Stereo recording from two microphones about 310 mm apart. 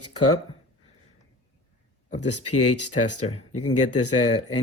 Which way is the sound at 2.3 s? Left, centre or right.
Left.